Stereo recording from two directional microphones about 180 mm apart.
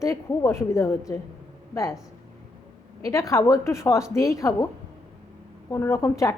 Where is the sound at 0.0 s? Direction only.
15° left (ahead or behind).